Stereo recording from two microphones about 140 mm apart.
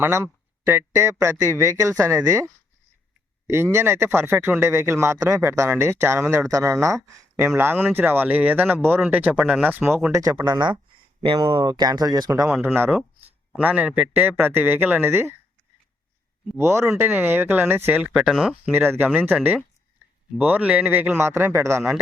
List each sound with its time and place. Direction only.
0.0 s speech: 20° right (ahead or behind)
12.6 s speech: 15° right (ahead or behind)
16.6 s speech: 20° right (ahead or behind)